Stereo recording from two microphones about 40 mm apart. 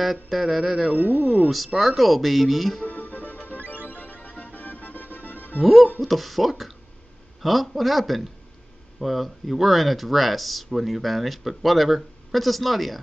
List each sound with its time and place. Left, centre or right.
0.0 s speech: centre
0.9 s speech: right
1.8 s speech: centre
2.8 s music: left
5.6 s speech: centre